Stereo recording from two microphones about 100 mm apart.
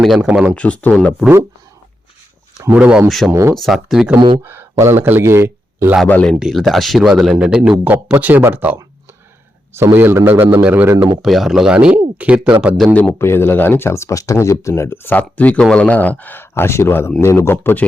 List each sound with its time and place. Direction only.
0.0 s speech: 5° right (ahead or behind)
0.3 s speech: 15° right (ahead or behind)
0.5 s speech: 15° left (ahead or behind)
2.7 s speech: 10° right (ahead or behind)
3.1 s speech: centre (ahead or behind)
4.4 s a man's voice: 25° right (ahead or behind)
6.1 s speech: 15° left (ahead or behind)
6.4 s speech: centre (ahead or behind)
8.2 s a man's voice: 20° right (ahead or behind)
11.2 s speech: centre (ahead or behind)
12.9 s speech: 15° left (ahead or behind)